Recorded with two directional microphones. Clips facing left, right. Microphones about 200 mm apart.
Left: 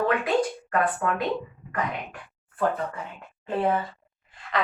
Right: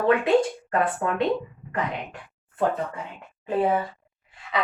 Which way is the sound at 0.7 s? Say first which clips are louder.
Right 2 dB; 30° right (ahead or behind).